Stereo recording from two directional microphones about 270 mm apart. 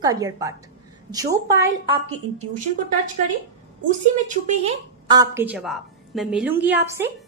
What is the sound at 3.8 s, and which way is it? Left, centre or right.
A woman's voice, right.